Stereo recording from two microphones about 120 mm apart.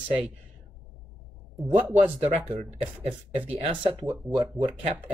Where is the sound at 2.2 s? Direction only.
65° right (ahead or behind).